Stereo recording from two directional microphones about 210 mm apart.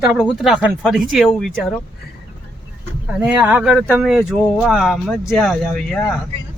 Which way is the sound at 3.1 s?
5° right (ahead or behind).